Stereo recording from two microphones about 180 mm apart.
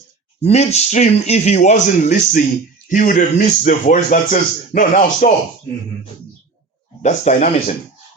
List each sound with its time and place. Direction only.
0.4 s speech: 35° left (ahead or behind)
7.0 s speech: 40° left (ahead or behind)